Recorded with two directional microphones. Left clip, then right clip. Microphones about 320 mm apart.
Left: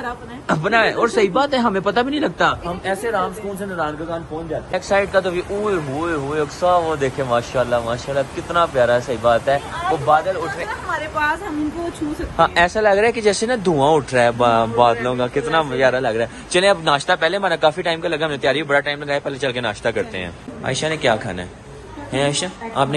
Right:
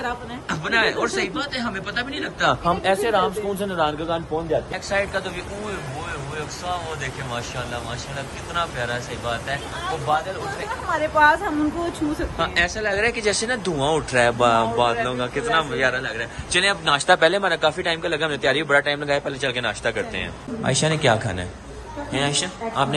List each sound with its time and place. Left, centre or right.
0.0 s speech: centre
3.7 s speech: centre
11.0 s a woman's voice: right
12.4 s speech: centre